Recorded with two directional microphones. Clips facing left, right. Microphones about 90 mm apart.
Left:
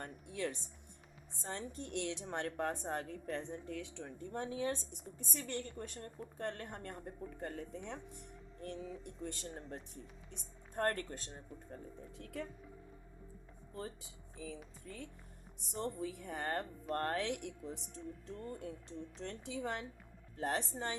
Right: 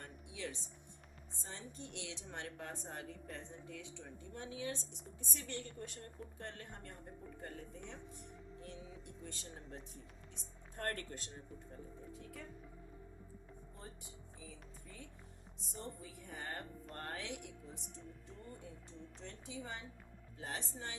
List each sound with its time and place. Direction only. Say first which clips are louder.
0.0 s a sound: left 6 dB; 50° left (ahead or behind)
1.5 s a woman's voice: left 7 dB; 55° left (ahead or behind)
4.2 s a woman's voice: left 7 dB; 45° left (ahead or behind)
10.8 s speech: left 6 dB; 40° left (ahead or behind)
12.1 s speech: left 10 dB; 70° left (ahead or behind)
13.7 s speech: left 11 dB; 90° left; by 19.8 s 65° left (ahead or behind)
20.4 s a woman's voice: left 8 dB; 55° left (ahead or behind)